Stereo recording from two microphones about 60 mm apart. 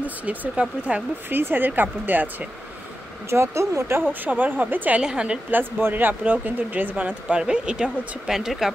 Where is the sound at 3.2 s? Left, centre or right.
Right.